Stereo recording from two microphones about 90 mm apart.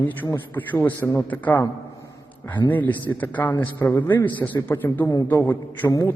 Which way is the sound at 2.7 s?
20° left (ahead or behind).